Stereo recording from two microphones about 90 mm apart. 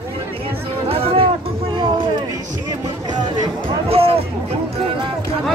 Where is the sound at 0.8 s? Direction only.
90° right.